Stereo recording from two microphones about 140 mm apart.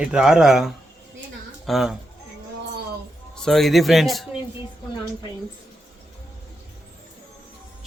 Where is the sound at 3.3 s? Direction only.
5° left (ahead or behind).